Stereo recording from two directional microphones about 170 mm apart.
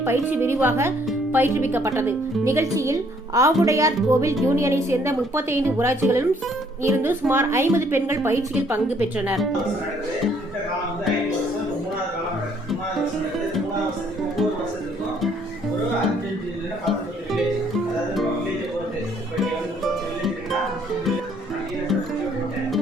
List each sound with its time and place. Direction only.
0.0 s speech: 15° right (ahead or behind)
19.4 s music: centre (ahead or behind)